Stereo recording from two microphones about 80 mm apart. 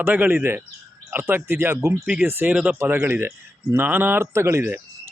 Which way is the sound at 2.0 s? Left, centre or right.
Right.